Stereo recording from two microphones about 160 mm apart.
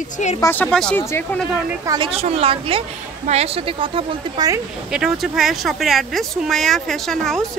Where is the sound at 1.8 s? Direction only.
30° right (ahead or behind).